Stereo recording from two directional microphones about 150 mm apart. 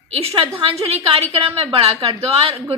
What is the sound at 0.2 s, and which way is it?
A woman's voice, 40° right (ahead or behind).